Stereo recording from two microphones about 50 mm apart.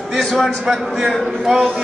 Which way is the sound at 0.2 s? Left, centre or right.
Centre.